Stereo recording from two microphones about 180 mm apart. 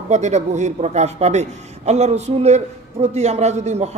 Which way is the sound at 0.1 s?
40° right (ahead or behind).